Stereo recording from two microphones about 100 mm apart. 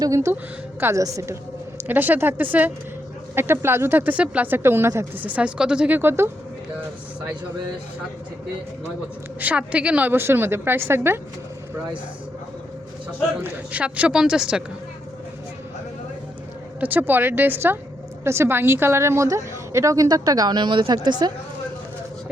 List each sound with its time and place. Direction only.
0.0 s a woman's voice: 30° right (ahead or behind)
1.9 s a woman's voice: 20° right (ahead or behind)
5.2 s a woman's voice: 15° right (ahead or behind)
6.0 s speech: 25° right (ahead or behind)
9.4 s speech: 15° right (ahead or behind)
13.4 s a woman's voice: 15° right (ahead or behind)
16.8 s a woman's voice: 20° right (ahead or behind); by 21.3 s 45° right (ahead or behind)